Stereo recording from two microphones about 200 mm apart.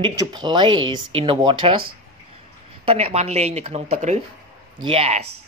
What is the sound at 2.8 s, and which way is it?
Speech, 30° right (ahead or behind).